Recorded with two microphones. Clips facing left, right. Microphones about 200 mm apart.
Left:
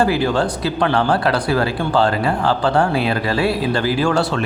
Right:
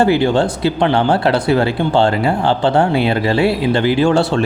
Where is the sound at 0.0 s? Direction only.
25° right (ahead or behind).